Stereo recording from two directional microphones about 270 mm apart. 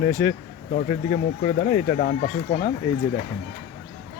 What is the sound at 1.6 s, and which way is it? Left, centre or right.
Speech, left.